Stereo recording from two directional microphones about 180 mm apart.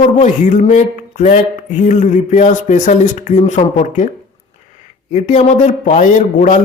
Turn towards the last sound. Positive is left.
turn(degrees=45)  # may be behind; listen again after turning